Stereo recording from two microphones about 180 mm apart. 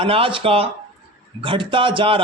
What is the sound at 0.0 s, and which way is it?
Speech, 30° right (ahead or behind).